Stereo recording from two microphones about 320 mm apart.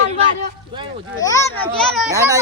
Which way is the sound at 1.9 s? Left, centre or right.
Centre.